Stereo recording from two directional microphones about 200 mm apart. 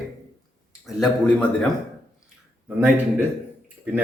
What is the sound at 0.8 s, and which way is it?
Speech, centre (ahead or behind).